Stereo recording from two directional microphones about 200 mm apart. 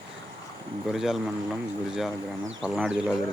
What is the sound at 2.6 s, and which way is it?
Speech, centre (ahead or behind).